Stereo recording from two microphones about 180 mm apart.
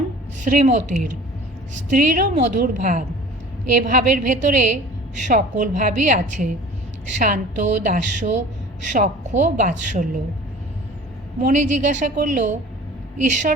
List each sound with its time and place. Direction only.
0.4 s a woman's voice: 45° right (ahead or behind)
11.3 s a woman's voice: 45° right (ahead or behind)